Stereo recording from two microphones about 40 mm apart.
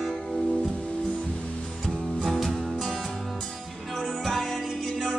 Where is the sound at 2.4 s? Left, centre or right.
Centre.